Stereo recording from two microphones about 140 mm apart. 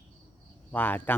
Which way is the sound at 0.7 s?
15° left (ahead or behind).